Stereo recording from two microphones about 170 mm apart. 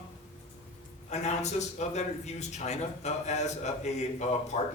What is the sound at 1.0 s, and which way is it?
A man's voice, 40° left (ahead or behind).